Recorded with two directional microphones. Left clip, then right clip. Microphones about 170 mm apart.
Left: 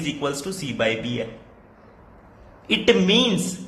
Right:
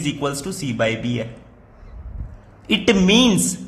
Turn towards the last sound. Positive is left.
turn(degrees=-35)  # may be behind; listen again after turning